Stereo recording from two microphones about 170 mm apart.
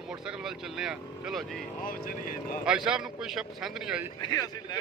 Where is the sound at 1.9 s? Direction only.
55° left (ahead or behind).